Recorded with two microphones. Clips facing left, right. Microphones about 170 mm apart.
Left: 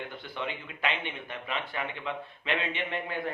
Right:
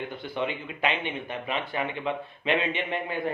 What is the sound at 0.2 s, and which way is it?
Speech, 15° right (ahead or behind).